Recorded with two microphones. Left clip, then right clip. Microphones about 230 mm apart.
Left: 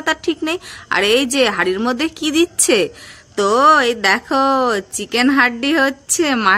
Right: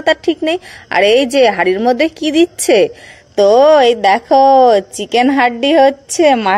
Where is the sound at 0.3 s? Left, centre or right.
Centre.